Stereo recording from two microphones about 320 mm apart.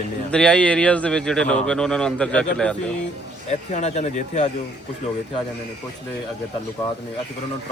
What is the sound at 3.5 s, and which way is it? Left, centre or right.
Speech, left.